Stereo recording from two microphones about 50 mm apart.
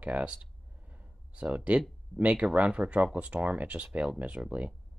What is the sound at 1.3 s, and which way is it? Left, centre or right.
Speech, right.